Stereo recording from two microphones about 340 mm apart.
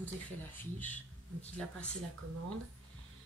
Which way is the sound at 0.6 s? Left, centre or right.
Centre.